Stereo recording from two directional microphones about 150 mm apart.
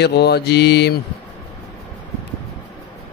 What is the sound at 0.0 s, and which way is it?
Mantra, 90° left.